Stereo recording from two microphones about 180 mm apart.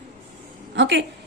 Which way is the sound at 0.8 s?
90° right.